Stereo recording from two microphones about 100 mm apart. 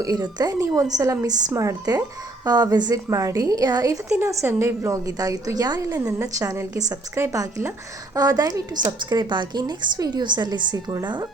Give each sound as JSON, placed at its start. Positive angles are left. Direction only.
{"t": 0.0, "sound": "a woman's voice", "side_deg": -40}
{"t": 4.2, "sound": "a woman's voice", "side_deg": -30}
{"t": 9.0, "sound": "a woman's voice", "side_deg": -50}